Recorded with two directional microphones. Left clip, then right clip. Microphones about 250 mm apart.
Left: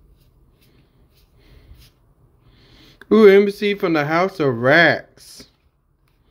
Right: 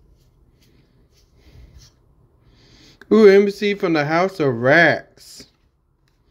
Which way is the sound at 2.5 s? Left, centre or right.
Centre.